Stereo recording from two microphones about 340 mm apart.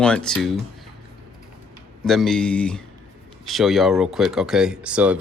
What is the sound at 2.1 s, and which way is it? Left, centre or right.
Speech, centre.